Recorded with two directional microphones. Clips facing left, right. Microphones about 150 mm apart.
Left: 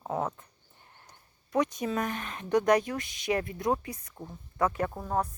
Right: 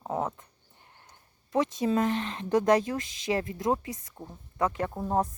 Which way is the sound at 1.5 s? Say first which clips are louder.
Right 3 dB; 25° right (ahead or behind).